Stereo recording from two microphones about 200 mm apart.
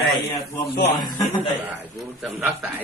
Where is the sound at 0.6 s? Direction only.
55° left (ahead or behind).